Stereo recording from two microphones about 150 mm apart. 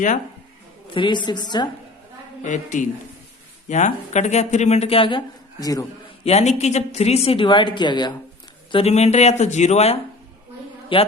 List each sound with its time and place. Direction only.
0.9 s a woman's voice: 35° left (ahead or behind)
2.4 s a man's voice: 55° left (ahead or behind); by 5.8 s 25° left (ahead or behind)
6.2 s a woman's voice: 45° left (ahead or behind); by 8.1 s 30° left (ahead or behind)
8.7 s speech: 45° left (ahead or behind)
10.9 s a woman's voice: 35° left (ahead or behind)